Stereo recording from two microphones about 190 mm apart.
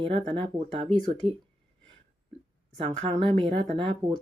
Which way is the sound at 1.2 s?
30° right (ahead or behind).